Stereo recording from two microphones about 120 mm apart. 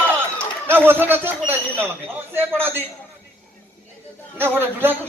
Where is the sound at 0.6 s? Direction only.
20° right (ahead or behind).